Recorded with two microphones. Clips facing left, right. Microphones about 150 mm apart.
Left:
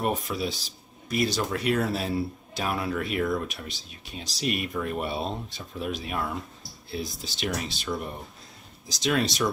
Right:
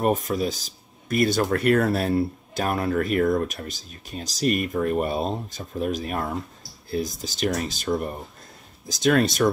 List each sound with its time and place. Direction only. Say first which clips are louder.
0.2 s speech: right 5 dB; 45° right (ahead or behind)